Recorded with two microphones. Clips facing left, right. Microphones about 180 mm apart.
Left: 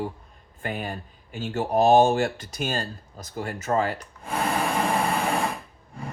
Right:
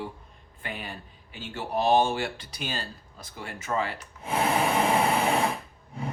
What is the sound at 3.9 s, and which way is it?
Wood, 5° right (ahead or behind).